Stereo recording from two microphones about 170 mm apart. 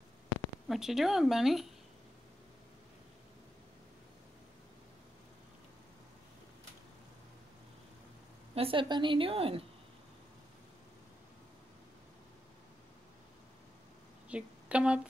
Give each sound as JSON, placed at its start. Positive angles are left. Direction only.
{"t": 0.7, "sound": "a woman's voice", "side_deg": 0}
{"t": 8.5, "sound": "a woman's voice", "side_deg": -30}
{"t": 14.3, "sound": "speech", "side_deg": -5}